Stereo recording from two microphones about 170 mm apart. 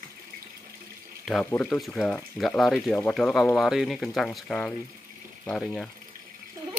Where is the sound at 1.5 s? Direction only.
10° left (ahead or behind).